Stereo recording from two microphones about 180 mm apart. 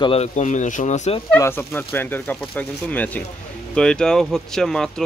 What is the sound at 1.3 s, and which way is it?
Speech, 15° left (ahead or behind).